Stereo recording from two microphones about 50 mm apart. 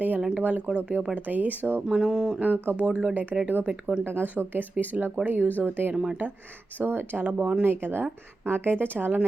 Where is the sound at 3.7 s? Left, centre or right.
Centre.